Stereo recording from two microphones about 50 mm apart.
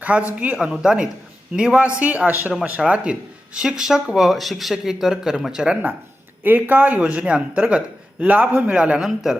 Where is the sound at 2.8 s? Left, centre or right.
Centre.